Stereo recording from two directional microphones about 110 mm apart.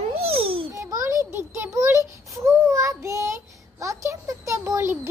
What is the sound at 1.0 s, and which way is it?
A child's voice, 30° right (ahead or behind).